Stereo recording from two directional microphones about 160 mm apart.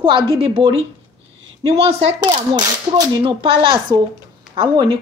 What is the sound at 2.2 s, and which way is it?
A woman's voice, 30° right (ahead or behind).